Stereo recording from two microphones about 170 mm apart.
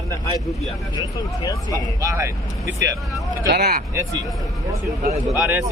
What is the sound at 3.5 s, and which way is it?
Speech, 65° right (ahead or behind).